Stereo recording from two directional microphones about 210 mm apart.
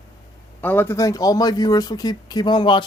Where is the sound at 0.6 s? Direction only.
10° left (ahead or behind).